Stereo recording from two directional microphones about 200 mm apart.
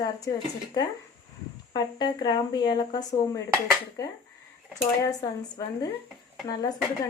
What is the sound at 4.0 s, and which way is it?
Dishes, 15° left (ahead or behind).